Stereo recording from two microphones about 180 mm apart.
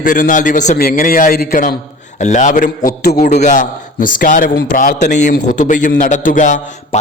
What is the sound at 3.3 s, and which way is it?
A man's voice, 40° left (ahead or behind).